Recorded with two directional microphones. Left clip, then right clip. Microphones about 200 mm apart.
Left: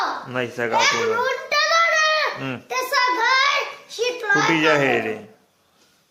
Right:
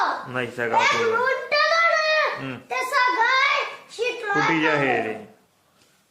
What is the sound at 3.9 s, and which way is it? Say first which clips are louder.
A child's voice: left 3 dB; 25° left (ahead or behind).